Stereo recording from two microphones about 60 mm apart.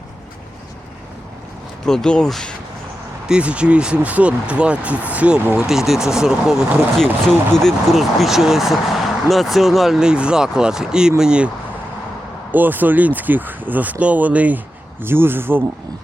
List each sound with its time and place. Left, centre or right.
1.8 s speech: centre
3.2 s speech: centre
5.5 s speech: centre
6.9 s speech: centre
7.9 s speech: centre
10.0 s speech: centre
12.5 s speech: right
15.0 s speech: right